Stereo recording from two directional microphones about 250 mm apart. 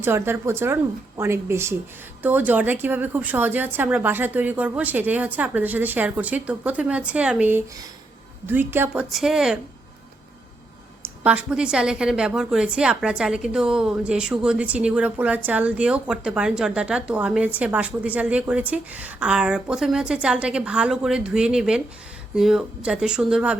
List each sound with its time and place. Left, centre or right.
0.0 s a woman's voice: centre
11.0 s speech: centre